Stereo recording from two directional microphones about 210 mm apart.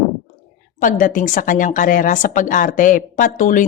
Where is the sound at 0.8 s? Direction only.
40° left (ahead or behind).